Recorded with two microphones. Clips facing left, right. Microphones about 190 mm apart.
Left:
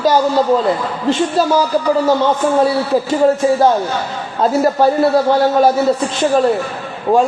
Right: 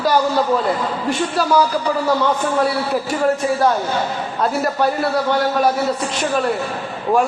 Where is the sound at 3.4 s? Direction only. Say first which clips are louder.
Left 5 dB; 30° left (ahead or behind).